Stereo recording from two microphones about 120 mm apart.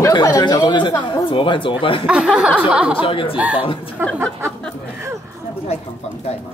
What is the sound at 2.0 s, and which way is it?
Speech, 10° right (ahead or behind).